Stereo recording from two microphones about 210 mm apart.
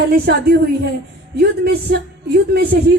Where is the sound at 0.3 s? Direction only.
50° right (ahead or behind).